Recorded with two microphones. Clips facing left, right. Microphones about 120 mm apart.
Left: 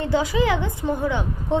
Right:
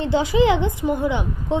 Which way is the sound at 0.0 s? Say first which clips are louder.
Right 3 dB; 25° right (ahead or behind).